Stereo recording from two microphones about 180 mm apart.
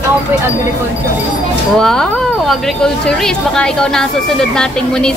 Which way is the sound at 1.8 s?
Centre (ahead or behind).